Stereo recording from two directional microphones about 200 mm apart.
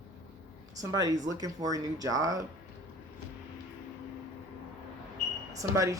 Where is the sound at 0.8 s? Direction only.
20° right (ahead or behind).